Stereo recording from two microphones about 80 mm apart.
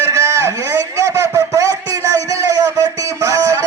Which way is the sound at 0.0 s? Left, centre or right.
Right.